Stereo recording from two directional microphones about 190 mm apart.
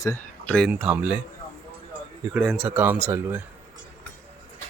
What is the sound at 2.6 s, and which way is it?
Speech, 10° right (ahead or behind).